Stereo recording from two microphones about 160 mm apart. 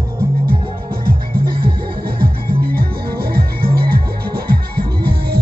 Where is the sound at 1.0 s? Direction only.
65° right (ahead or behind).